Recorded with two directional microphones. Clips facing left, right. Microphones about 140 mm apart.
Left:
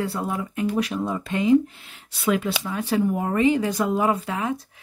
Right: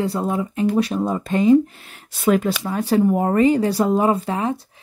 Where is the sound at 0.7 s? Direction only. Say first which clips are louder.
Right 5 dB; 35° right (ahead or behind).